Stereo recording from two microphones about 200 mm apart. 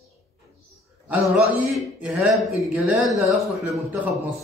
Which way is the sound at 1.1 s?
5° right (ahead or behind).